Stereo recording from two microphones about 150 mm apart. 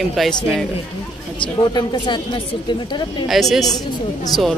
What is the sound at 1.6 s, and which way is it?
Speech, 30° left (ahead or behind).